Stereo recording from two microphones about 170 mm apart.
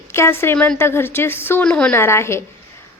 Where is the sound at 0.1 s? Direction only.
15° left (ahead or behind).